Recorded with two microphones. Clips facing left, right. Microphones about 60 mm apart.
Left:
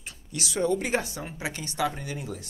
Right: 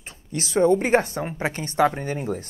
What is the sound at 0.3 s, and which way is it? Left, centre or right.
A woman's voice, right.